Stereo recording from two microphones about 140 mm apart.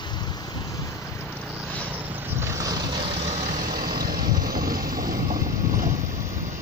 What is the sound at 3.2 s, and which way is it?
Vehicle, 55° right (ahead or behind).